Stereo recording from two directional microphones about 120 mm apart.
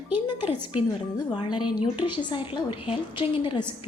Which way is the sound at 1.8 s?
40° left (ahead or behind).